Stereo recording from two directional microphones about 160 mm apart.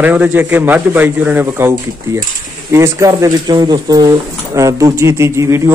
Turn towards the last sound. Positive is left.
turn(degrees=-15)  # may be behind; listen again after turning